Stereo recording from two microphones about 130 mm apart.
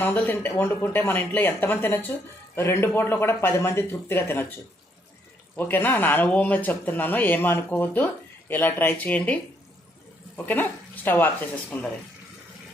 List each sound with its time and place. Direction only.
0.0 s speech: 15° left (ahead or behind)
5.5 s speech: 15° left (ahead or behind)